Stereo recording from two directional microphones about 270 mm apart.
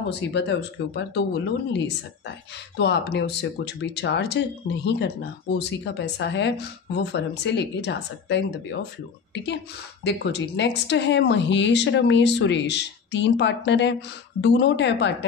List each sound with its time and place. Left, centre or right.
0.1 s speech: left
2.8 s speech: left
10.0 s speech: left